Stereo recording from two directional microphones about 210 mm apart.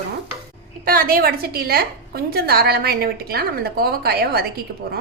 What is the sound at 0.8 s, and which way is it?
A woman's voice, 45° right (ahead or behind).